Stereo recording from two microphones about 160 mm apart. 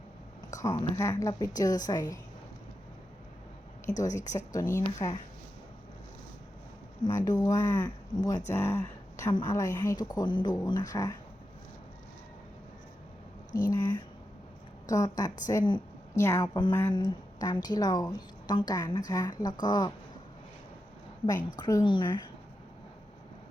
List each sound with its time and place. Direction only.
0.5 s a woman's voice: 25° left (ahead or behind)
4.0 s a woman's voice: 25° left (ahead or behind)
7.3 s a woman's voice: 25° left (ahead or behind)
13.5 s a woman's voice: 25° left (ahead or behind)
16.6 s a woman's voice: 30° left (ahead or behind)
21.6 s a woman's voice: 25° left (ahead or behind)